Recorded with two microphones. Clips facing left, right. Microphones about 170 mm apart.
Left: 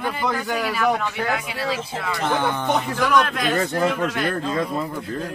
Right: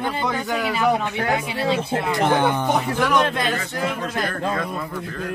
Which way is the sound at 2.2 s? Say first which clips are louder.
Right 2 dB; 15° right (ahead or behind).